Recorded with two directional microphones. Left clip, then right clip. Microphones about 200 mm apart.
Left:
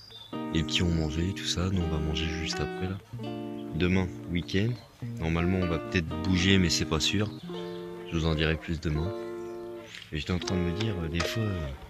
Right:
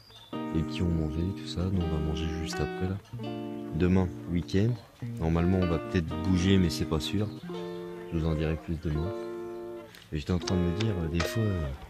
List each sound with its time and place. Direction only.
0.3 s speech: 5° left (ahead or behind)
2.1 s speech: 20° right (ahead or behind)
2.6 s music: centre (ahead or behind)
3.7 s speech: 30° right (ahead or behind)
5.6 s speech: centre (ahead or behind)
6.2 s speech: 15° right (ahead or behind)
10.1 s speech: 25° right (ahead or behind)
10.4 s speech: centre (ahead or behind)